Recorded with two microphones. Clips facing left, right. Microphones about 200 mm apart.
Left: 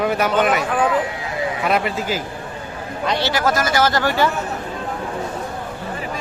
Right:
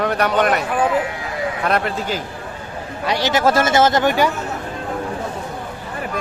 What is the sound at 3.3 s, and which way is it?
Speech, 25° right (ahead or behind).